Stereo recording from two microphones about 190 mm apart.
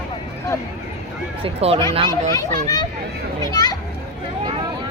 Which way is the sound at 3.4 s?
20° left (ahead or behind).